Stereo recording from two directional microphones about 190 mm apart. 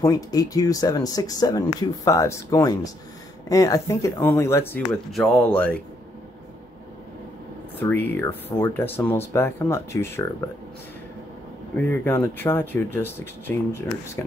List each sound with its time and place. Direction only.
0.0 s speech: 20° left (ahead or behind)
5.1 s speech: centre (ahead or behind)
7.8 s speech: 10° left (ahead or behind)
11.7 s speech: 10° left (ahead or behind)